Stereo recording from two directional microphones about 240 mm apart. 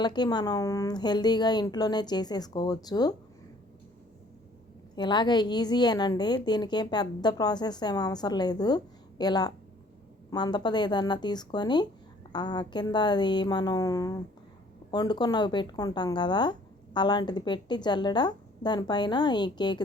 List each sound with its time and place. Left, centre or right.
0.0 s speech: centre
4.9 s speech: centre